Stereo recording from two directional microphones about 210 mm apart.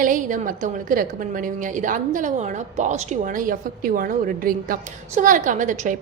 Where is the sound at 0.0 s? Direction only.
40° right (ahead or behind).